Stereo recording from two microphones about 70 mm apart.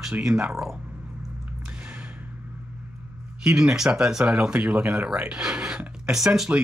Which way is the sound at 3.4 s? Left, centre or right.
Centre.